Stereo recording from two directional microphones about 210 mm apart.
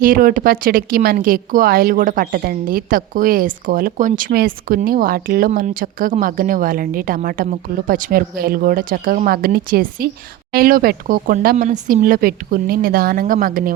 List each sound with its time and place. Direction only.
0.0 s speech: 45° right (ahead or behind)